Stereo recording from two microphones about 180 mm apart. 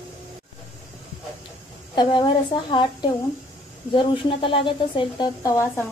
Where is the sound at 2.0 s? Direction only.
25° left (ahead or behind).